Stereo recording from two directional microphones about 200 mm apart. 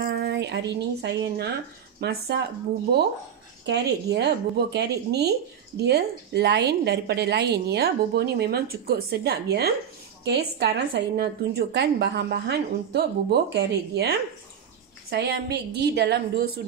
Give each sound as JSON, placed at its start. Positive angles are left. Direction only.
{"t": 0.0, "sound": "a woman's voice", "side_deg": -55}
{"t": 3.6, "sound": "a woman's voice", "side_deg": -55}